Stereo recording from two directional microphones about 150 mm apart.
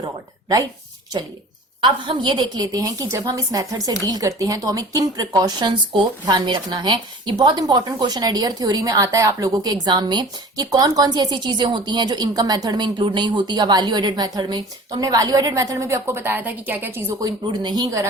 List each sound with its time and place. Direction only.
0.0 s speech: 25° right (ahead or behind)
1.8 s a woman's voice: 30° right (ahead or behind)